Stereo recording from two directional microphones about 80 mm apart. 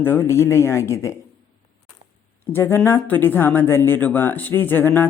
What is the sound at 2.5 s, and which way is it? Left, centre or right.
Speech, left.